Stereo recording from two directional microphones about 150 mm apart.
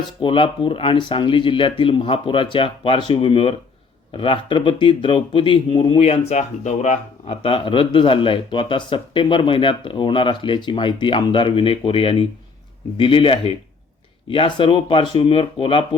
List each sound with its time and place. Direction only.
0.2 s speech: 35° left (ahead or behind)